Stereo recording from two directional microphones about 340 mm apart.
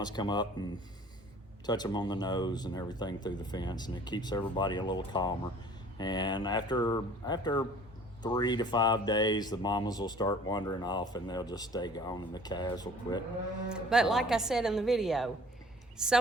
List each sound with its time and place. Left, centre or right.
0.0 s speech: centre
13.7 s speech: centre